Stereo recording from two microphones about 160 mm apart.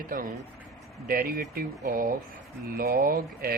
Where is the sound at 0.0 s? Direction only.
60° right (ahead or behind).